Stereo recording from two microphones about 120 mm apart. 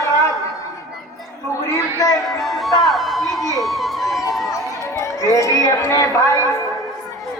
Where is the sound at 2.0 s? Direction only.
30° left (ahead or behind).